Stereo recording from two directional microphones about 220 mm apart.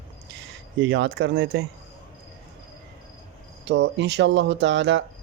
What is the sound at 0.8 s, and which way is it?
Speech, 55° right (ahead or behind).